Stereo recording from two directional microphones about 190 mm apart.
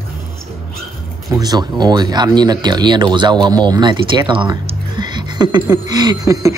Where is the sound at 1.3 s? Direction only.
20° right (ahead or behind).